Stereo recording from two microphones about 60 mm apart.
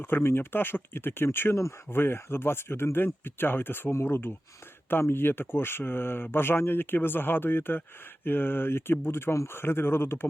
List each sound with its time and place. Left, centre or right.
0.0 s speech: left